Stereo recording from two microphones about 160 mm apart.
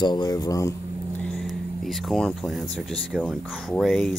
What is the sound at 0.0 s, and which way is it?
Speech, 25° left (ahead or behind).